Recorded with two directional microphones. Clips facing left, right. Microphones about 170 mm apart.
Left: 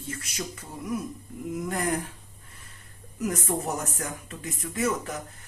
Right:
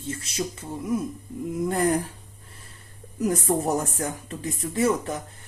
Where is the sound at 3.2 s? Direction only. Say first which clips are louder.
Right 5 dB; 30° right (ahead or behind).